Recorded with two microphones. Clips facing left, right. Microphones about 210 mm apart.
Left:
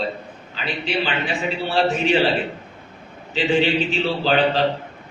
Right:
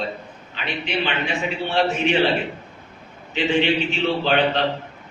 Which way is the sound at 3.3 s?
35° left (ahead or behind).